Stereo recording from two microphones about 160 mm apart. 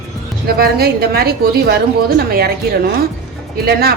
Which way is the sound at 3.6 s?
75° right (ahead or behind).